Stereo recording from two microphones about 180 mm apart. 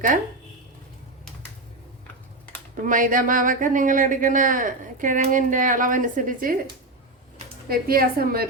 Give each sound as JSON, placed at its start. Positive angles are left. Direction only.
{"t": 2.8, "sound": "speech", "side_deg": -50}
{"t": 7.7, "sound": "a woman's voice", "side_deg": -55}